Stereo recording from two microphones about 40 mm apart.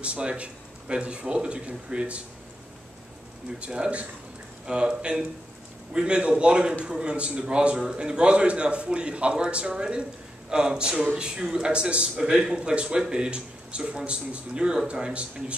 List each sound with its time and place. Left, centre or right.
0.0 s a man's voice: right
3.5 s a man's voice: right